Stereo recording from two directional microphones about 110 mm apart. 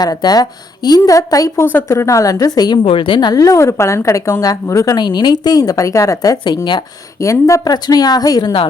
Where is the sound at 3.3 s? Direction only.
30° left (ahead or behind).